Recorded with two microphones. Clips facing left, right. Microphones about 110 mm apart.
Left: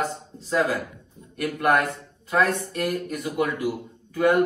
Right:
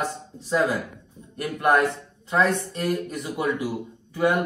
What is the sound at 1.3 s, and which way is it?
A man's voice, 25° right (ahead or behind).